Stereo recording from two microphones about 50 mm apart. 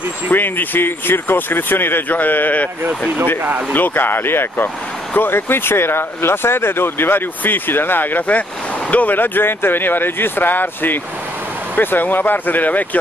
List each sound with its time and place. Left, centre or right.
0.3 s speech: left
3.7 s speech: left